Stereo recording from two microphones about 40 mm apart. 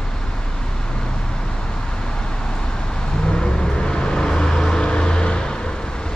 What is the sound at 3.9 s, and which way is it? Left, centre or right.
Vehicle, centre.